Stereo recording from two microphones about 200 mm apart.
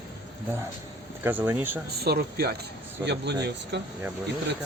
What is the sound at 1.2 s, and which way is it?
Speech, 10° right (ahead or behind).